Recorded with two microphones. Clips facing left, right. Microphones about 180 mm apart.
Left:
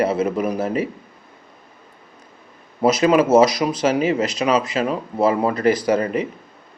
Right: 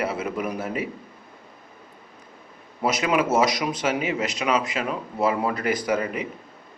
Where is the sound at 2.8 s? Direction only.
30° left (ahead or behind).